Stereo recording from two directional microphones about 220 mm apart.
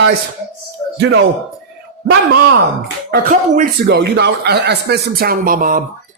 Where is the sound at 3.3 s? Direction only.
40° right (ahead or behind).